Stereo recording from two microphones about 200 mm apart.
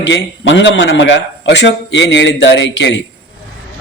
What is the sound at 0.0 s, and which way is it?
A man's voice, 65° left (ahead or behind).